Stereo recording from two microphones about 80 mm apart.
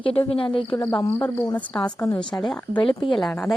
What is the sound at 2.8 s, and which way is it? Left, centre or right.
Speech, left.